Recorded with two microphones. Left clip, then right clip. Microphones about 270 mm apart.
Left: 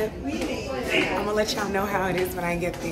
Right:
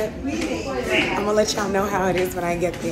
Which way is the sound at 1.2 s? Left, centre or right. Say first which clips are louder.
Right 5 dB; centre.